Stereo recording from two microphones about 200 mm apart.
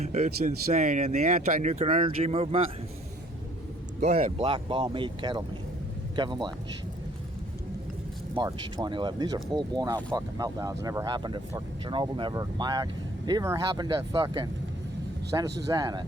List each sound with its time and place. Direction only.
0.1 s speech: 35° right (ahead or behind)
4.0 s speech: 35° right (ahead or behind)
8.3 s speech: 20° right (ahead or behind)
15.6 s speech: 20° right (ahead or behind)